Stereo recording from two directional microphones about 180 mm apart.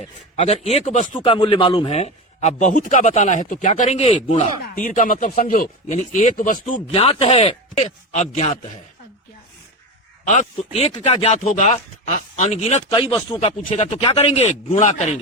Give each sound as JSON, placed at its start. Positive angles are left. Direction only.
{"t": 0.3, "sound": "speech", "side_deg": 35}
{"t": 1.2, "sound": "speech", "side_deg": 30}
{"t": 4.6, "sound": "speech", "side_deg": 50}
{"t": 6.9, "sound": "speech", "side_deg": 35}
{"t": 10.2, "sound": "speech", "side_deg": 40}